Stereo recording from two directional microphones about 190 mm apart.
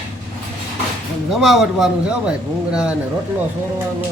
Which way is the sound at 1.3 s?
Centre (ahead or behind).